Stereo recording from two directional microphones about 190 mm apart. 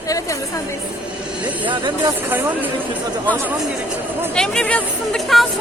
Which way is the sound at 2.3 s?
10° right (ahead or behind).